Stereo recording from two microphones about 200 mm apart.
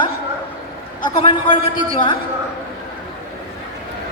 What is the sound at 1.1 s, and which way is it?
Speech, 25° left (ahead or behind).